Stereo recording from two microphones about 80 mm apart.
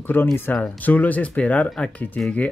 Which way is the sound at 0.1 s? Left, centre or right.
Left.